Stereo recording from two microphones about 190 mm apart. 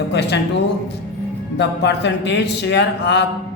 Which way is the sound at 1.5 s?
65° left (ahead or behind).